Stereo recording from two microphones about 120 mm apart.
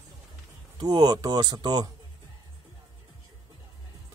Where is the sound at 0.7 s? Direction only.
35° right (ahead or behind).